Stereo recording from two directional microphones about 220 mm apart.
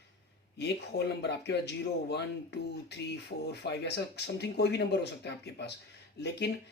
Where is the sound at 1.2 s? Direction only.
50° left (ahead or behind).